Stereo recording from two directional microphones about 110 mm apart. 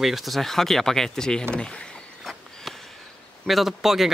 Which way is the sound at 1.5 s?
10° left (ahead or behind).